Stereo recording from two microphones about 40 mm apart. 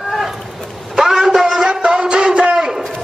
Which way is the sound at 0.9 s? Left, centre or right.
Centre.